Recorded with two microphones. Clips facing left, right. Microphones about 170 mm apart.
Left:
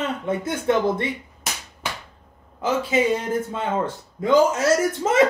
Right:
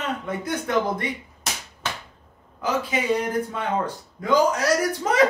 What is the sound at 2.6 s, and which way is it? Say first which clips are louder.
A man's voice: left 4 dB; 25° left (ahead or behind).